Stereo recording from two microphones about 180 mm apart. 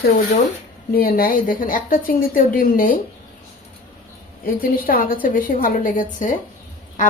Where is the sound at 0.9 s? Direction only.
55° left (ahead or behind).